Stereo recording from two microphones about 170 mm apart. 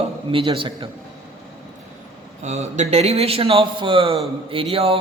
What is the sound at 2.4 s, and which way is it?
A man's voice, 40° right (ahead or behind).